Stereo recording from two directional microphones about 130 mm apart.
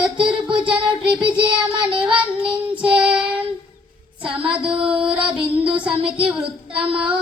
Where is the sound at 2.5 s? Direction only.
40° right (ahead or behind).